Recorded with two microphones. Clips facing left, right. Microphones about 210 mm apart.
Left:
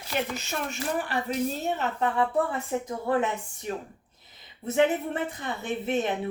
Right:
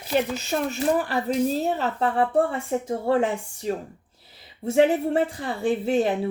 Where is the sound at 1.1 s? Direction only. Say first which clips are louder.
Right 5 dB; 35° right (ahead or behind).